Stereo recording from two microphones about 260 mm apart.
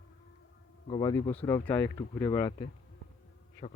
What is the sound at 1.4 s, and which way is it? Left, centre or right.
Speech, centre.